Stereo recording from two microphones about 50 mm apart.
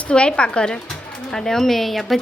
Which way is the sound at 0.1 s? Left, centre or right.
Left.